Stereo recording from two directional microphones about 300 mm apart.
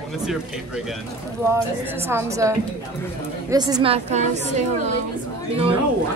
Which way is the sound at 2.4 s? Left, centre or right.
Centre.